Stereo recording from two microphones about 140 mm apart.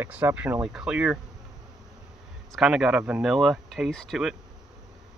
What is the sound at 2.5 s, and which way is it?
Speech, 5° right (ahead or behind).